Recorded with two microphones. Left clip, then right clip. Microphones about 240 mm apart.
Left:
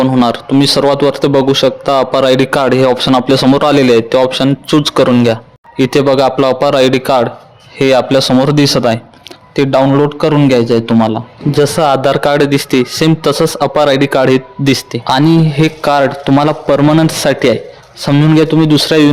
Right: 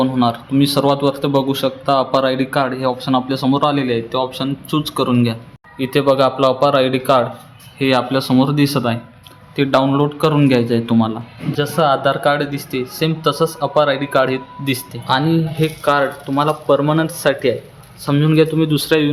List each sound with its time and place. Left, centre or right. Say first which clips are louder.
0.0 s a man's voice: left 6 dB; left